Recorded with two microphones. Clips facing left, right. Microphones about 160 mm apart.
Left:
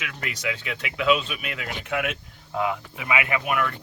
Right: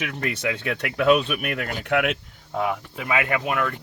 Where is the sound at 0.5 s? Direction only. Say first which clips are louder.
Right 5 dB; 50° right (ahead or behind).